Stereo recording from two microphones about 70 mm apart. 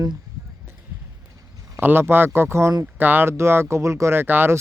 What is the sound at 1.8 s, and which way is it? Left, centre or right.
Speech, right.